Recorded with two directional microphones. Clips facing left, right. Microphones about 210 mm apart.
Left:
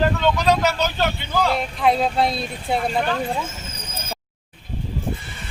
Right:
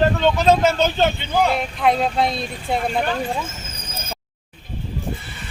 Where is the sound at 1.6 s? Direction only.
Centre (ahead or behind).